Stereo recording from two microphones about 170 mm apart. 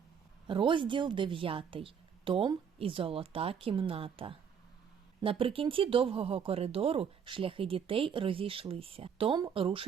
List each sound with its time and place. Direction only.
0.4 s speech: 30° right (ahead or behind)